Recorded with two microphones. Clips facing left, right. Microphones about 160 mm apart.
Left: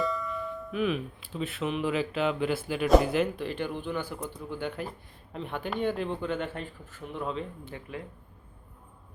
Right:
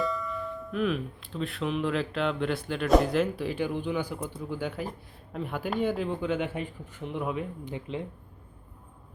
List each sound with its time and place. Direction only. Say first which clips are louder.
0.0 s speech: even; centre (ahead or behind)
3.3 s speech: right 3 dB; 10° right (ahead or behind)